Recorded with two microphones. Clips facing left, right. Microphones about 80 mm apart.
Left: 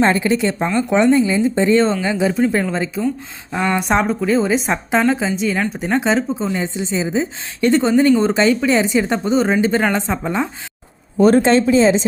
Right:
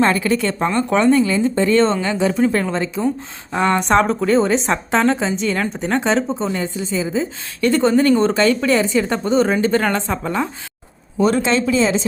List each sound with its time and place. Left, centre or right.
0.0 s a woman's voice: left; by 3.8 s centre
3.8 s a woman's voice: centre
6.6 s a woman's voice: left
11.2 s speech: left